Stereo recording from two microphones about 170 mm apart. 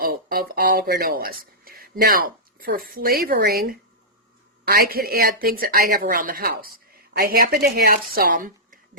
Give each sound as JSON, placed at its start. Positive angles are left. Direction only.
{"t": 0.0, "sound": "speech", "side_deg": -60}